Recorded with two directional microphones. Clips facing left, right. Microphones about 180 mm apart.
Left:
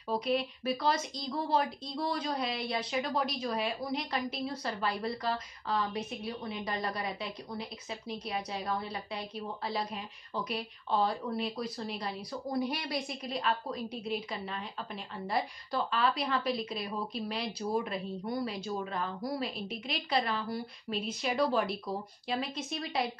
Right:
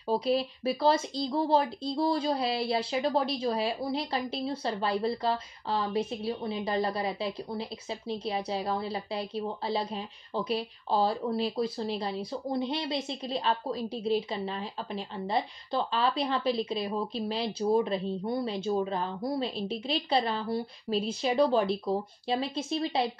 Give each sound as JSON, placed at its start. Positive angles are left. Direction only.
{"t": 0.1, "sound": "a woman's voice", "side_deg": -30}